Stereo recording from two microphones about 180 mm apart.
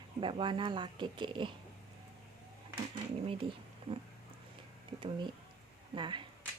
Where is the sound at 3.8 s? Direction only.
30° right (ahead or behind).